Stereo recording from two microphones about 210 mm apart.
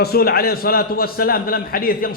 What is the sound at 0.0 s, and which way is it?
A man's voice, 45° left (ahead or behind).